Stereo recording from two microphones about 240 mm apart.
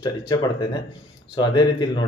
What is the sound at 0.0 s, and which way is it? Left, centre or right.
Speech, centre.